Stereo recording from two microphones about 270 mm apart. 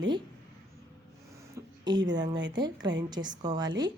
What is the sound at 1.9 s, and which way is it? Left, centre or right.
Speech, centre.